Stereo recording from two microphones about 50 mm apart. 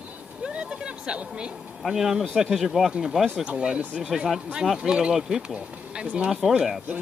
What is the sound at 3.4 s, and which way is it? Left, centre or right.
Speech, centre.